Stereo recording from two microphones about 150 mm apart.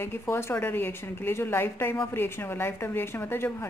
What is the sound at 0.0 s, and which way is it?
A woman's voice, 15° left (ahead or behind).